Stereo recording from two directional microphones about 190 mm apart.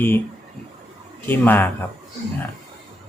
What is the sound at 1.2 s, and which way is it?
Speech, 10° left (ahead or behind).